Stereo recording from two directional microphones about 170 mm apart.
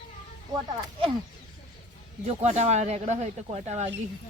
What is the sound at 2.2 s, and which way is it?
Speech, 40° right (ahead or behind).